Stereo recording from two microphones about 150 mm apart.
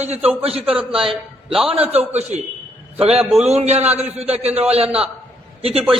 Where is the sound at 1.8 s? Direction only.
45° right (ahead or behind).